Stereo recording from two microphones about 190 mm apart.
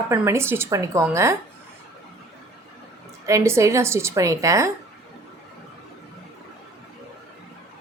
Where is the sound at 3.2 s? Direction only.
15° right (ahead or behind).